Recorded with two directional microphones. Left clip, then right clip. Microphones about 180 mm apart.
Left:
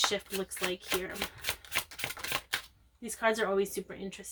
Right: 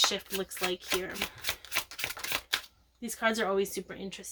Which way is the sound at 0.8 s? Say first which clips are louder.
Right 2 dB; 20° right (ahead or behind).